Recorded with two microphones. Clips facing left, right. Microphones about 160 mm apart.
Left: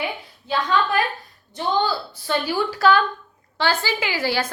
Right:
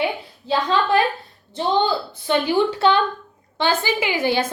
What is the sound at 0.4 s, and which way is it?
A woman's voice, 30° right (ahead or behind).